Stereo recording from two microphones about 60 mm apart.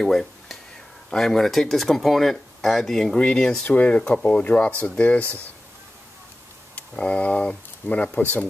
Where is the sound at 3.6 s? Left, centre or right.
Left.